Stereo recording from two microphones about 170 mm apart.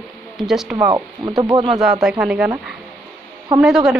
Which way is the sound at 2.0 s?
5° right (ahead or behind).